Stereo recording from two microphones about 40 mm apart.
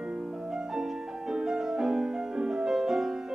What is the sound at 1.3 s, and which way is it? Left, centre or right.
Music, centre.